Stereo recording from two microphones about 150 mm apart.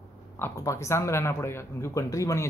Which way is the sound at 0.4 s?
20° left (ahead or behind).